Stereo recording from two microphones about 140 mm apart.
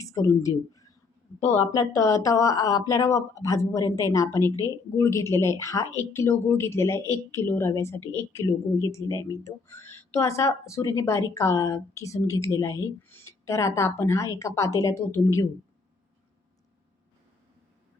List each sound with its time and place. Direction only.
0.0 s a woman's voice: 25° left (ahead or behind)